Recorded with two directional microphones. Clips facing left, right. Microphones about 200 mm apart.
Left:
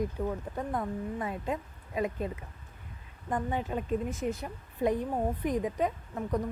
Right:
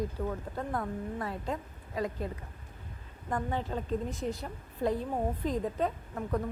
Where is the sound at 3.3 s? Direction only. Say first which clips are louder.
Left 1 dB; 15° left (ahead or behind).